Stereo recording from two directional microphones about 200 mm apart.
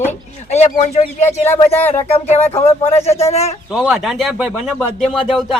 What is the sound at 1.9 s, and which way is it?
A man's voice, 30° left (ahead or behind).